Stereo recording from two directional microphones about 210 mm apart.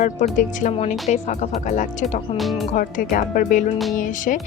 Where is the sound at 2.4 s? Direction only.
Centre (ahead or behind).